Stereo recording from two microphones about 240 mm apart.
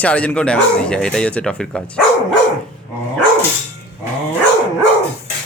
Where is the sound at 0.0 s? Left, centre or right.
Centre.